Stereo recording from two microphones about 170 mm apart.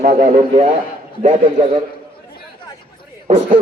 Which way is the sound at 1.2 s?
45° right (ahead or behind).